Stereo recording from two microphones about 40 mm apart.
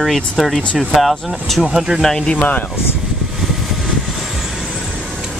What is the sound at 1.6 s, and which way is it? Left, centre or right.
Speech, centre.